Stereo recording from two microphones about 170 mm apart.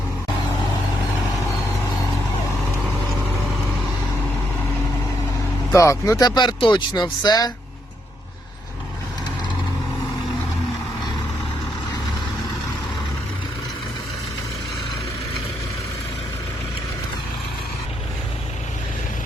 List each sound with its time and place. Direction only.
5.7 s speech: 15° left (ahead or behind)